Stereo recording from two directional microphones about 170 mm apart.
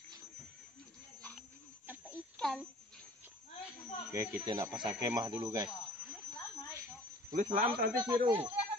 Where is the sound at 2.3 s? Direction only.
5° left (ahead or behind).